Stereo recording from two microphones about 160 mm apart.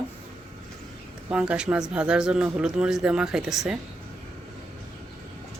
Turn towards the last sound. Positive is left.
turn(degrees=-5)  # may be behind; listen again after turning